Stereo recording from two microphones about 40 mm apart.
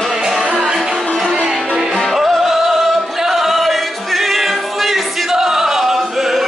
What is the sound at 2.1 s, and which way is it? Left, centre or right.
Music, centre.